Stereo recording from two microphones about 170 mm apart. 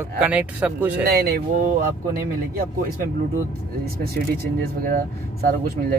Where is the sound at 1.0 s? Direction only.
65° right (ahead or behind).